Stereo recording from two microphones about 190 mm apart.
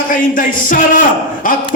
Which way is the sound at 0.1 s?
45° left (ahead or behind).